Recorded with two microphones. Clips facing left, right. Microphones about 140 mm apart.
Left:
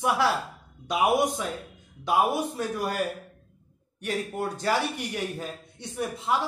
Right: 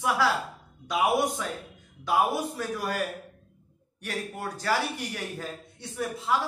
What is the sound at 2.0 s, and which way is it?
Speech, 25° left (ahead or behind).